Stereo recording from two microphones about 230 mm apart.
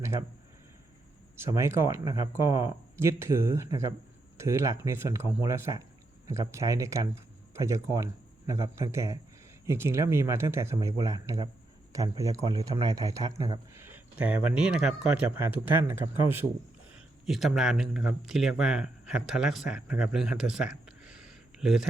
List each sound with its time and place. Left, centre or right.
0.0 s a man's voice: centre
1.5 s a man's voice: centre